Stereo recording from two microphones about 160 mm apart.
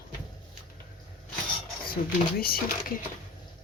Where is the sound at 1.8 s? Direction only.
70° left (ahead or behind).